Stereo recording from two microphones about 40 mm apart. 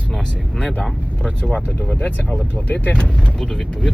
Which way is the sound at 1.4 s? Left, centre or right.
Left.